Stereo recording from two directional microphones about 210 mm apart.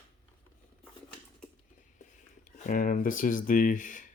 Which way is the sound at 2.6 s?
40° left (ahead or behind).